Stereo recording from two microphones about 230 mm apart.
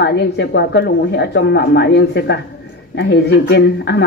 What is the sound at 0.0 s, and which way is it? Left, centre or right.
Speech, left.